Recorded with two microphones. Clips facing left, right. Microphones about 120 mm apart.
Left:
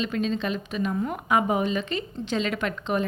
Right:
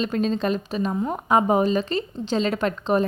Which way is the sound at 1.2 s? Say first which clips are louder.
Right 5 dB; 35° right (ahead or behind).